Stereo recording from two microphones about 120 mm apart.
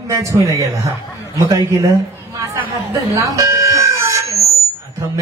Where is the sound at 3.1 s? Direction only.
25° right (ahead or behind).